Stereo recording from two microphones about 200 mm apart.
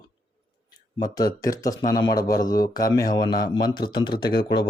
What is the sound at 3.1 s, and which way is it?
Speech, 20° left (ahead or behind).